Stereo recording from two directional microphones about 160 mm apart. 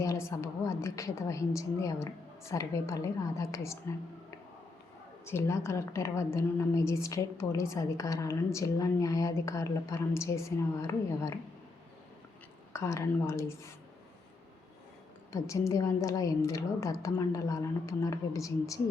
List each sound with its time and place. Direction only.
0.0 s a woman's voice: 20° left (ahead or behind)
5.2 s a woman's voice: 15° left (ahead or behind)
12.7 s a woman's voice: 20° left (ahead or behind)
15.3 s a woman's voice: 20° left (ahead or behind)